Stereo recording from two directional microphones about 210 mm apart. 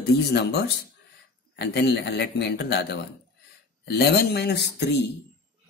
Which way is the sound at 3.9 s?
50° left (ahead or behind).